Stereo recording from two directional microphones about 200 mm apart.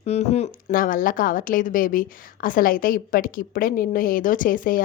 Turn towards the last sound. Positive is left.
turn(degrees=45)  # may be behind; listen again after turning